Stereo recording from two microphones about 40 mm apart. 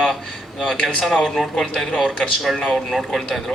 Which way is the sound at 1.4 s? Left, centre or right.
Centre.